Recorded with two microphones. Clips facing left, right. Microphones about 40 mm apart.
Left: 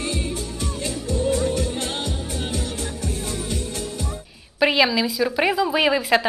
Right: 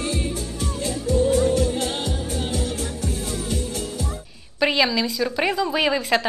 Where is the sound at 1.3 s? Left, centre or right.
Right.